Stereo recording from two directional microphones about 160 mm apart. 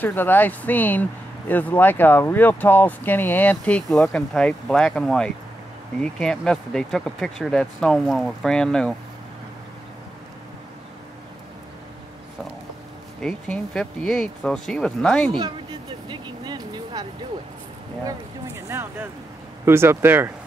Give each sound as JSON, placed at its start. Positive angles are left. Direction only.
{"t": 0.0, "sound": "speech", "side_deg": 10}
{"t": 13.2, "sound": "speech", "side_deg": 5}
{"t": 15.3, "sound": "speech", "side_deg": -30}
{"t": 18.0, "sound": "speech", "side_deg": -15}